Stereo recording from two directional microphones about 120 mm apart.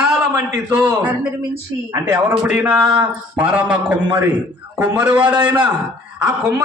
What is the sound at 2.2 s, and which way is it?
A man's voice, 10° right (ahead or behind).